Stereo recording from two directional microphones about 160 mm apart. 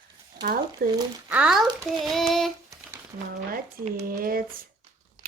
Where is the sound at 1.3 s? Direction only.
5° right (ahead or behind).